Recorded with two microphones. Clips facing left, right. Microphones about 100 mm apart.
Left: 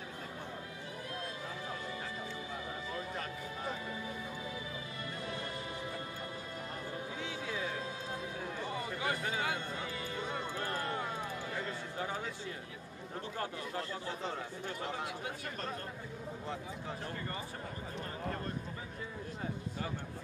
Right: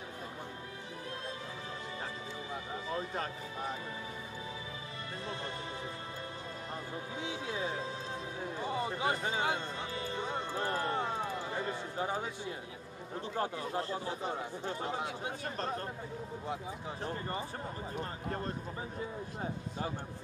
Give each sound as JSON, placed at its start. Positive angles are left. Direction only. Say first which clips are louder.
{"t": 5.2, "sound": "music", "louder": "right 2 dB", "side_deg": -25}
{"t": 7.2, "sound": "a sound", "louder": "right 4 dB", "side_deg": -20}
{"t": 8.5, "sound": "music", "louder": "right 6 dB", "side_deg": -25}
{"t": 11.5, "sound": "a sound", "louder": "right 3 dB", "side_deg": -25}
{"t": 13.4, "sound": "a man's voice", "louder": "right 5 dB", "side_deg": -30}
{"t": 17.0, "sound": "speech", "louder": "right 4 dB", "side_deg": -25}